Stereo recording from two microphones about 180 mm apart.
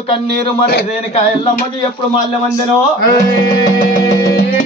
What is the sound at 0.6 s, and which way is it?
Music, 60° left (ahead or behind).